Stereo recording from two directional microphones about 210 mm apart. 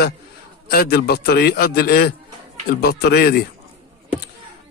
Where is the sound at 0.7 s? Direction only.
45° left (ahead or behind).